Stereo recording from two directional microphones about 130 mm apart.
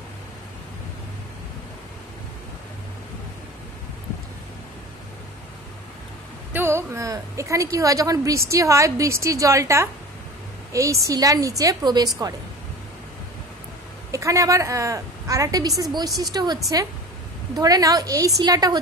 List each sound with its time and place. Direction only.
6.5 s a woman's voice: 20° right (ahead or behind)
14.1 s a woman's voice: 25° right (ahead or behind)
17.6 s a woman's voice: 30° right (ahead or behind)